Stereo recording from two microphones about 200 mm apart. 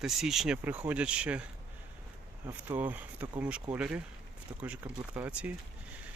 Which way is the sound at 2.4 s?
10° right (ahead or behind).